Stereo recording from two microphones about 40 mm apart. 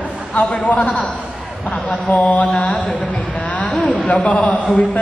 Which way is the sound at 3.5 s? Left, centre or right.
Left.